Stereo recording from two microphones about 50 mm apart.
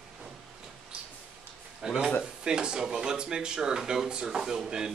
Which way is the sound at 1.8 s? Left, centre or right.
Centre.